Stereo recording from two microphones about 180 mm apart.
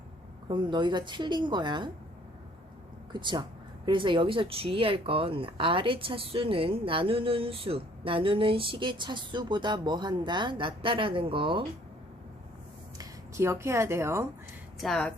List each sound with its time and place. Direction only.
0.4 s speech: 25° right (ahead or behind)
3.1 s speech: 25° right (ahead or behind)
13.0 s speech: 15° right (ahead or behind)
14.8 s speech: centre (ahead or behind)